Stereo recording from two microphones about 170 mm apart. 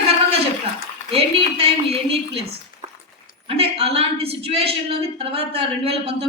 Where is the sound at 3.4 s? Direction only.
35° right (ahead or behind).